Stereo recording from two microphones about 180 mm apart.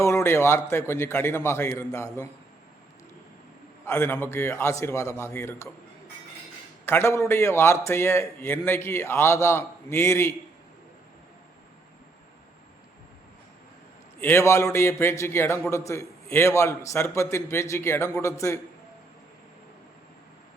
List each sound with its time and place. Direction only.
0.0 s a man's voice: 15° left (ahead or behind)
3.8 s a man's voice: 10° left (ahead or behind)
6.8 s a man's voice: 15° left (ahead or behind)
14.2 s a man's voice: 15° left (ahead or behind)